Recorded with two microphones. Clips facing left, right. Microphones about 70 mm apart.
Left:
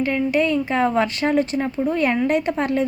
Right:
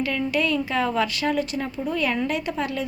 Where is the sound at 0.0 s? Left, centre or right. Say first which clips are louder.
Left 4 dB; left.